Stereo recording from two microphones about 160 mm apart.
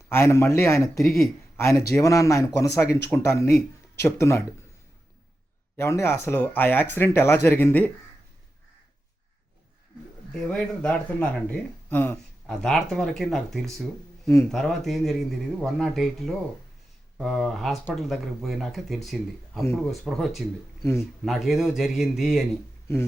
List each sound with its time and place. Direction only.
0.1 s speech: 15° left (ahead or behind)
5.7 s speech: 15° left (ahead or behind)
10.3 s speech: 5° left (ahead or behind)